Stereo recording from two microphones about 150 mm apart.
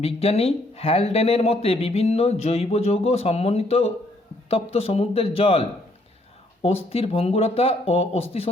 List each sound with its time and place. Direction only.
0.0 s speech: 40° left (ahead or behind)